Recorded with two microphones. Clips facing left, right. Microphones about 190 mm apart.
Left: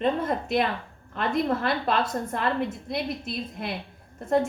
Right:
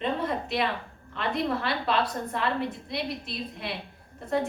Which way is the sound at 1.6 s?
45° left (ahead or behind).